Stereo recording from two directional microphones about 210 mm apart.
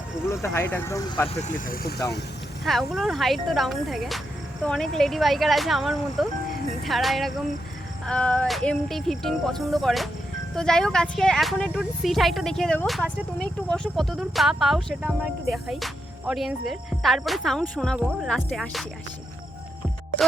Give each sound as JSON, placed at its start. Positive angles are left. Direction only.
{"t": 0.4, "sound": "speech", "side_deg": 10}
{"t": 1.3, "sound": "speech", "side_deg": 35}
{"t": 2.6, "sound": "speech", "side_deg": 0}